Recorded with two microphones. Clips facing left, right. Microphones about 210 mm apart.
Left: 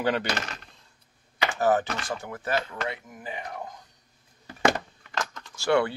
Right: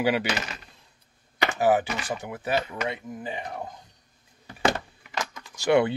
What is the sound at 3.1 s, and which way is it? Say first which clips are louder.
Speech: right 3 dB; 25° right (ahead or behind).